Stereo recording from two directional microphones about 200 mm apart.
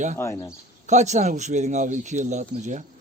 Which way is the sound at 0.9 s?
35° right (ahead or behind).